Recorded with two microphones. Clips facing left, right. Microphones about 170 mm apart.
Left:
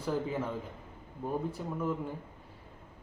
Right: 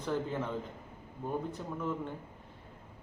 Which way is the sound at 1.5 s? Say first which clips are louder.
Left 2 dB; 10° left (ahead or behind).